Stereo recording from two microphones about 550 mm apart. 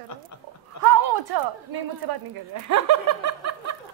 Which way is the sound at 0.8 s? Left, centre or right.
Right.